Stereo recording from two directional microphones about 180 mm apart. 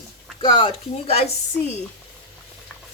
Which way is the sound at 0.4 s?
25° left (ahead or behind).